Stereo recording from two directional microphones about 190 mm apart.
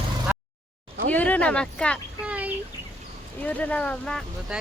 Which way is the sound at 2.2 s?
10° right (ahead or behind).